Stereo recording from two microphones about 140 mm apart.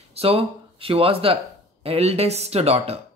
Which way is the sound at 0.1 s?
45° right (ahead or behind).